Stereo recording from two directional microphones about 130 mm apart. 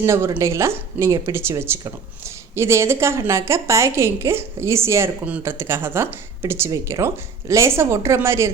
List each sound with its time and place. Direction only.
0.0 s speech: 20° right (ahead or behind)